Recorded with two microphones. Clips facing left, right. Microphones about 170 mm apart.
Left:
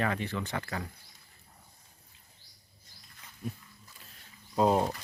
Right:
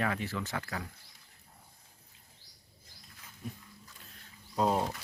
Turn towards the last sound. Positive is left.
turn(degrees=10)  # may be behind; listen again after turning